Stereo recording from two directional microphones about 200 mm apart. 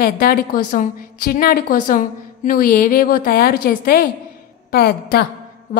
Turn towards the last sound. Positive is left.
turn(degrees=50)  # may be behind; listen again after turning